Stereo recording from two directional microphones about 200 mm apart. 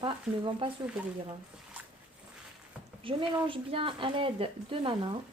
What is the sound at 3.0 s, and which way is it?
Speech, 25° right (ahead or behind).